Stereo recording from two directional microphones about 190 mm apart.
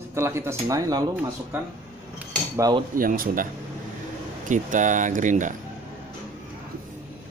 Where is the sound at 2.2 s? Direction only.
20° right (ahead or behind).